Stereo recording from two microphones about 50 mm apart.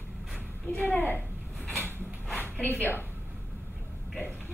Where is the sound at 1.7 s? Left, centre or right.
Left.